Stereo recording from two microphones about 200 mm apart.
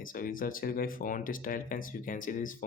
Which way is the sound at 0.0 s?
45° left (ahead or behind).